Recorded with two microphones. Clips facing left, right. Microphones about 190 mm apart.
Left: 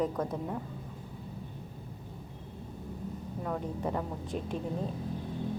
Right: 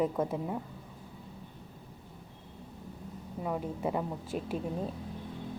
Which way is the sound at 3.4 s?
10° right (ahead or behind).